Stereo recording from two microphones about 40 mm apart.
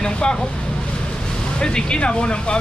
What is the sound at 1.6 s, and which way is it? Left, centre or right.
Speech, left.